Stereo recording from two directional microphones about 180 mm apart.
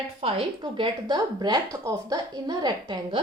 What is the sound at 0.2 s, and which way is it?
A woman's voice, 35° right (ahead or behind).